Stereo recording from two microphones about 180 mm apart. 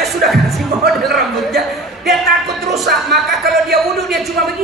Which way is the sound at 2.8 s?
65° right (ahead or behind).